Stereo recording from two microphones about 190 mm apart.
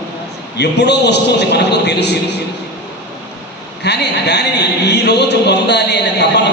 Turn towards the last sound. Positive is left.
turn(degrees=65)  # may be behind; listen again after turning